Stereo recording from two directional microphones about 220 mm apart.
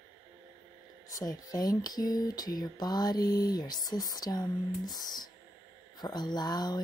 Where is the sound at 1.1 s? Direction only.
15° left (ahead or behind).